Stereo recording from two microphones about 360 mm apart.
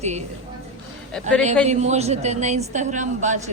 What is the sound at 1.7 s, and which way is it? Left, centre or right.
Speech, centre.